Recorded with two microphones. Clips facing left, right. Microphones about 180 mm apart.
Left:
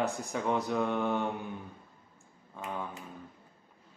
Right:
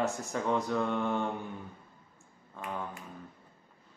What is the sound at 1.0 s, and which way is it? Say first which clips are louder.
Mantra: left 1 dB; 20° left (ahead or behind).